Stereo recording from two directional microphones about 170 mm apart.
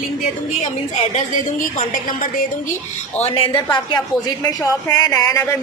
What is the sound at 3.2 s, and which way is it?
Speech, 35° left (ahead or behind).